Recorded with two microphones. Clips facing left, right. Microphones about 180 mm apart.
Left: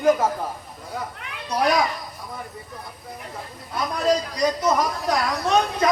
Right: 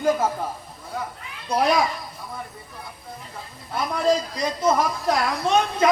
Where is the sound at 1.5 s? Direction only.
25° right (ahead or behind).